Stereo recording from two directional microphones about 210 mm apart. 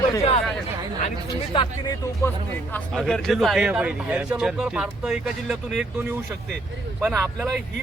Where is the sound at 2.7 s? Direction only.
Centre (ahead or behind).